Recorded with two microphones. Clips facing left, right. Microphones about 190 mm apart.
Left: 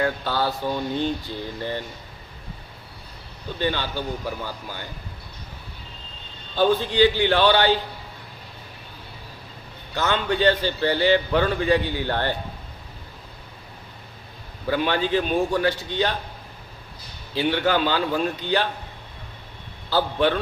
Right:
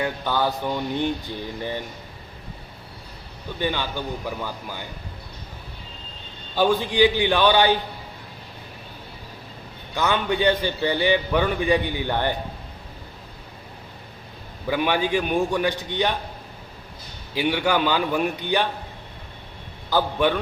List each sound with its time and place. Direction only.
0.0 s a man's voice: 15° right (ahead or behind)
3.6 s a man's voice: 15° right (ahead or behind)
6.6 s a man's voice: 15° right (ahead or behind)
9.9 s a man's voice: 15° right (ahead or behind)
14.7 s a man's voice: 15° right (ahead or behind)
17.3 s a man's voice: 15° right (ahead or behind)
19.9 s a man's voice: 15° right (ahead or behind)